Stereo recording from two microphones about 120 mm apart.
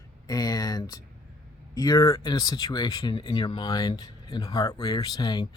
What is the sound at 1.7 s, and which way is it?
Speech, 30° left (ahead or behind).